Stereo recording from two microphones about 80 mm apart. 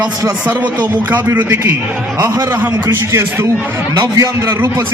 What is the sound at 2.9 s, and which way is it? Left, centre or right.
Speech, right.